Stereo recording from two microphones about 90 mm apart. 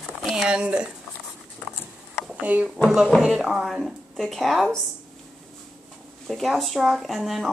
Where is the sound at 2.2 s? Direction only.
15° right (ahead or behind).